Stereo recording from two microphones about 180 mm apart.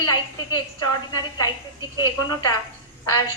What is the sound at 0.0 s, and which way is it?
A woman's voice, 20° left (ahead or behind).